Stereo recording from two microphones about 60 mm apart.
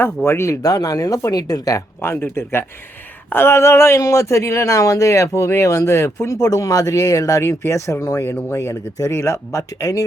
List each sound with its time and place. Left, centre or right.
0.0 s speech: left
0.6 s speech: left
2.0 s speech: left
6.4 s speech: left
7.6 s speech: left